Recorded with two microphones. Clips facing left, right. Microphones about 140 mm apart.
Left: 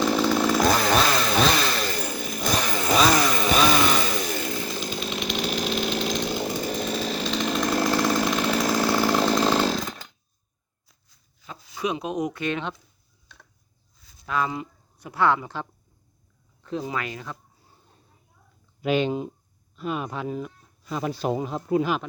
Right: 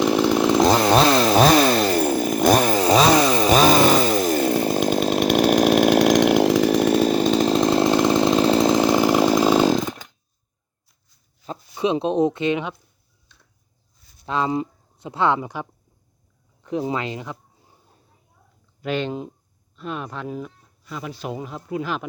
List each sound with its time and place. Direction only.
0.0 s chainsaw: 15° right (ahead or behind); by 2.7 s 55° right (ahead or behind)
2.7 s chainsaw: 30° right (ahead or behind); by 10.1 s 10° right (ahead or behind)
11.8 s speech: 30° right (ahead or behind)
14.3 s speech: 25° right (ahead or behind)
16.6 s speech: 20° right (ahead or behind)
18.8 s speech: 10° left (ahead or behind)
20.2 s speech: centre (ahead or behind)
20.9 s speech: 35° left (ahead or behind)